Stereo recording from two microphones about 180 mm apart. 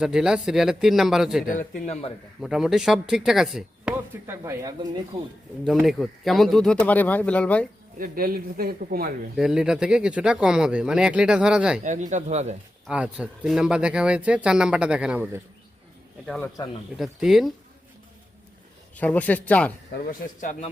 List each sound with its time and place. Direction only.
0.0 s speech: 5° right (ahead or behind)
1.5 s speech: 50° left (ahead or behind)
2.4 s speech: centre (ahead or behind); by 5.0 s 20° right (ahead or behind)
5.8 s speech: centre (ahead or behind)
7.9 s speech: 50° right (ahead or behind)
9.3 s speech: centre (ahead or behind)
11.8 s a man's voice: 40° right (ahead or behind)
12.9 s speech: 5° right (ahead or behind)
16.2 s speech: 5° left (ahead or behind)
18.9 s speech: 10° left (ahead or behind)
19.9 s speech: 50° left (ahead or behind)